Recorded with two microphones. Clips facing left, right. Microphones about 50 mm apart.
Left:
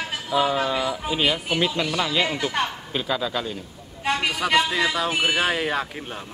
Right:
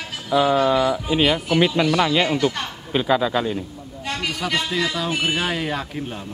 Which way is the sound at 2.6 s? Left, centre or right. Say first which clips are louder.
Left 4 dB; centre.